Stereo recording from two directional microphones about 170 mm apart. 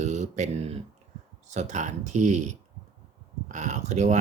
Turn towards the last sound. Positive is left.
turn(degrees=-45)  # may be behind; listen again after turning